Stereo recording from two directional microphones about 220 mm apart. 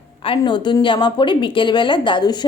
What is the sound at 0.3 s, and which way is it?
A woman's voice, 20° left (ahead or behind).